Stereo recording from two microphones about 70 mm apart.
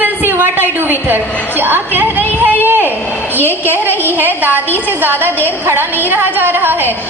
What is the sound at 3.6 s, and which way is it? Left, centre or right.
A woman's voice, right.